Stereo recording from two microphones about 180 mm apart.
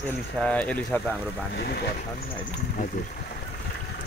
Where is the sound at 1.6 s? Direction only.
65° left (ahead or behind).